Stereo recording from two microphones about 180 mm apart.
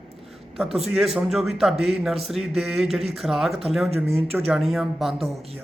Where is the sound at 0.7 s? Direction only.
35° right (ahead or behind).